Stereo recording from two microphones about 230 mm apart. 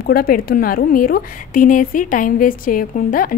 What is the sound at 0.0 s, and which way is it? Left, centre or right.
A woman's voice, left.